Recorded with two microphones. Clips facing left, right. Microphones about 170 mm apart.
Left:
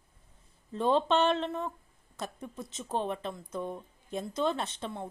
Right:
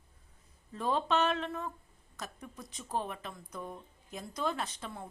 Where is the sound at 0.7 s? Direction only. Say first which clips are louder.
Left 5 dB; 25° left (ahead or behind).